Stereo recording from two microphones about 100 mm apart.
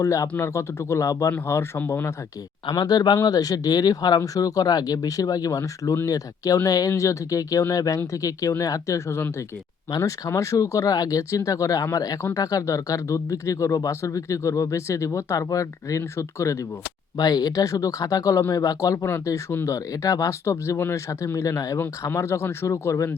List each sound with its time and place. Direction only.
0.0 s speech: 35° left (ahead or behind)
2.6 s speech: 45° left (ahead or behind)
17.2 s speech: 40° left (ahead or behind)